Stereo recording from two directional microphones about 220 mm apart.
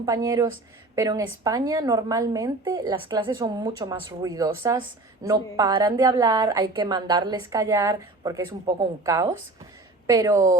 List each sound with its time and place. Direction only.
0.0 s a woman's voice: 15° right (ahead or behind)